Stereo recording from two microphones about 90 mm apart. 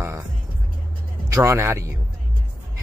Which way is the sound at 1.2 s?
30° right (ahead or behind).